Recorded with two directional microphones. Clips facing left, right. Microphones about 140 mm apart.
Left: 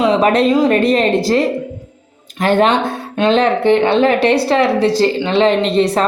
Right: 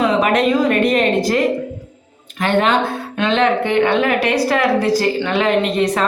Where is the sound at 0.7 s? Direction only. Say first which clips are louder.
Left 2 dB; 35° left (ahead or behind).